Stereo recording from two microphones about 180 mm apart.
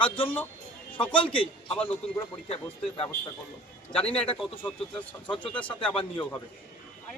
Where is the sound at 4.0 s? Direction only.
30° left (ahead or behind).